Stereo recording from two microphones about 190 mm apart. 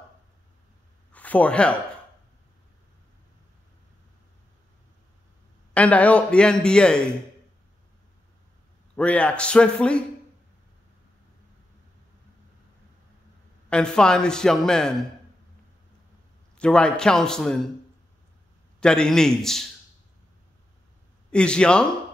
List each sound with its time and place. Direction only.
1.1 s speech: 10° left (ahead or behind)
5.7 s a man's voice: 5° left (ahead or behind)
8.9 s a man's voice: 5° left (ahead or behind)
13.7 s a man's voice: 5° left (ahead or behind)
16.5 s a man's voice: 5° left (ahead or behind)
18.8 s a man's voice: 5° left (ahead or behind)
21.3 s a man's voice: 5° left (ahead or behind)